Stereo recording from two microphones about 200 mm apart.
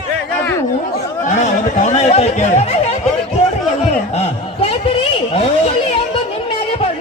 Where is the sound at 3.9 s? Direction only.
30° left (ahead or behind).